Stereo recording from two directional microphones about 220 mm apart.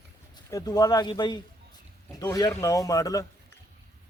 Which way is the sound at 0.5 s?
15° left (ahead or behind).